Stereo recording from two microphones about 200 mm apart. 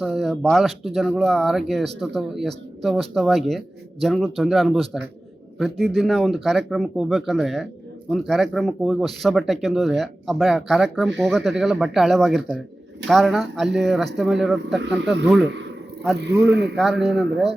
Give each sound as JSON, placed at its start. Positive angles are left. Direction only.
{"t": 0.0, "sound": "speech", "side_deg": 0}
{"t": 16.5, "sound": "speech", "side_deg": -55}
{"t": 16.7, "sound": "speech", "side_deg": 0}